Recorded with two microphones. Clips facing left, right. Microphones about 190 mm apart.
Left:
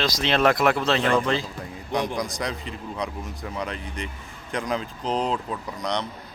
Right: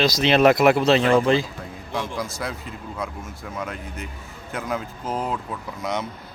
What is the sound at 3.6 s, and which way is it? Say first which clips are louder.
Speech: even; 5° right (ahead or behind).